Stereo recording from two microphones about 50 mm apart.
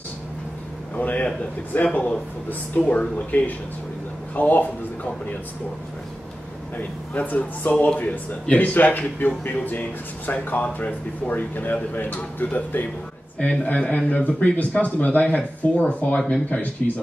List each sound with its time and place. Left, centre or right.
0.9 s speech: left
7.2 s speech: left
13.4 s a man's voice: left